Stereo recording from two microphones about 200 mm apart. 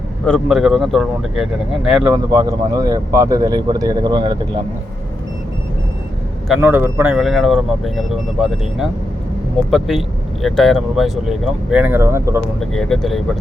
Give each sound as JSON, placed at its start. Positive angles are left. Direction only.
{"t": 0.3, "sound": "speech", "side_deg": 0}
{"t": 6.5, "sound": "speech", "side_deg": -10}
{"t": 12.5, "sound": "speech", "side_deg": 5}